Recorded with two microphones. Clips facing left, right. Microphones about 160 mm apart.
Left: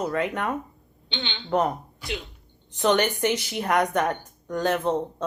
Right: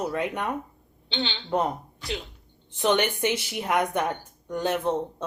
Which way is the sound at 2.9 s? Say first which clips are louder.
Left 2 dB; 15° right (ahead or behind).